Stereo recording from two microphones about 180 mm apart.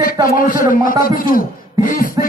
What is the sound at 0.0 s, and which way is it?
A man's voice, 50° left (ahead or behind).